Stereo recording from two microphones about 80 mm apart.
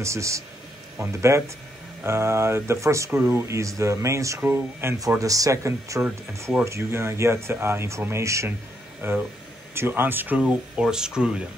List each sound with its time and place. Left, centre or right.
0.0 s speech: right
4.4 s speech: right
5.2 s speech: right; by 11.4 s centre